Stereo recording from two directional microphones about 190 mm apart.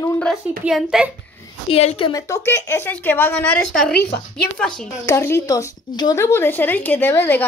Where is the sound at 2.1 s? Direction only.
15° left (ahead or behind).